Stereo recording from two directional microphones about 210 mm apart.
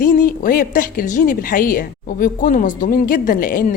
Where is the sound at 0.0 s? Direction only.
40° left (ahead or behind).